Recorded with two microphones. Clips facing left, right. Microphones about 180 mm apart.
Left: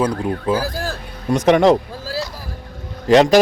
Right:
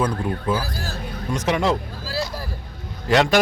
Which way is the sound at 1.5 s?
65° left (ahead or behind).